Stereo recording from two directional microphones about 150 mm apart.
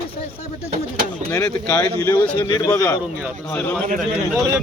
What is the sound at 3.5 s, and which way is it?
Speech, 10° left (ahead or behind).